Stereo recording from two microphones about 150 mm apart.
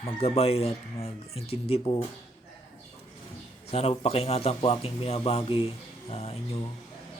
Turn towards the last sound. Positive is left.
turn(degrees=40)  # may be behind; listen again after turning